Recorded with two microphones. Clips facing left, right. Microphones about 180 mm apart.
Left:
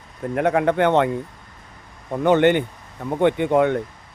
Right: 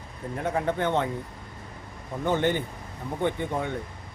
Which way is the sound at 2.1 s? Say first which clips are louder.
Left 9 dB; 70° left (ahead or behind).